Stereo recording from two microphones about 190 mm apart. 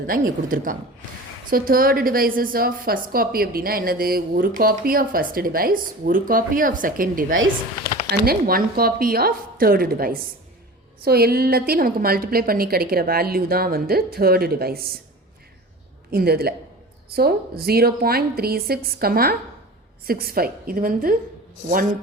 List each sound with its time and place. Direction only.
0.1 s a woman's voice: 45° right (ahead or behind)
16.1 s a woman's voice: 55° right (ahead or behind)